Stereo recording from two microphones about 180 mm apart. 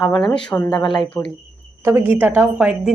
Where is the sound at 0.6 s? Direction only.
25° left (ahead or behind).